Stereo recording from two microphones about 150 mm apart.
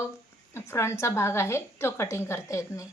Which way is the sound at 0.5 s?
15° left (ahead or behind).